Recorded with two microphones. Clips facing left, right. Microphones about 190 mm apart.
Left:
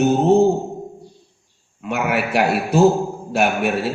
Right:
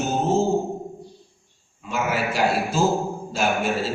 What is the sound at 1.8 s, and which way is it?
A man's voice, 65° left (ahead or behind).